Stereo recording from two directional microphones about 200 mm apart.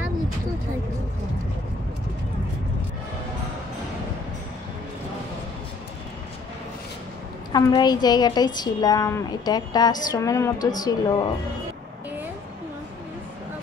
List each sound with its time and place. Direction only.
7.5 s a woman's voice: 20° left (ahead or behind)